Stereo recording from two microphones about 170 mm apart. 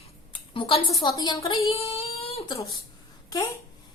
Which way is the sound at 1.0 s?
25° left (ahead or behind).